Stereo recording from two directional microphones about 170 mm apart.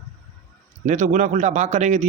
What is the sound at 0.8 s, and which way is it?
A man's voice, 45° right (ahead or behind).